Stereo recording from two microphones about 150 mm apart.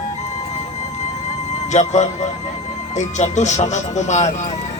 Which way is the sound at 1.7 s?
50° left (ahead or behind).